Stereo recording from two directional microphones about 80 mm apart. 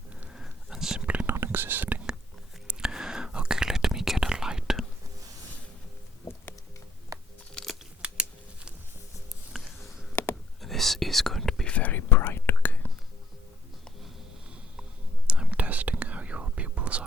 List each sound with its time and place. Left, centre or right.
0.3 s whispering: centre
1.4 s whispering: right
2.6 s whispering: centre
7.1 s a sound: right
7.5 s a sound: centre
8.0 s a sound: centre
10.6 s whispering: centre
11.7 s whispering: centre
12.0 s whispering: left
15.3 s whispering: centre